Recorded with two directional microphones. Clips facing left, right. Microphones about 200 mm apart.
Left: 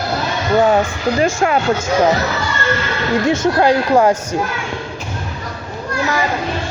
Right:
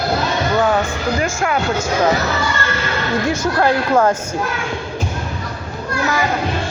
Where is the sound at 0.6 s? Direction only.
25° left (ahead or behind).